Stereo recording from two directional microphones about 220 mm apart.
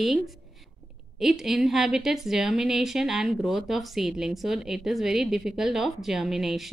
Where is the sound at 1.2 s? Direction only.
Centre (ahead or behind).